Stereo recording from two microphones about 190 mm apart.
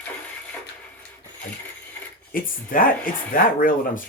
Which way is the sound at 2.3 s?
45° left (ahead or behind).